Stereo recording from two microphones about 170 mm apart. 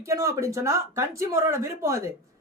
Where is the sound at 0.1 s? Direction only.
15° right (ahead or behind).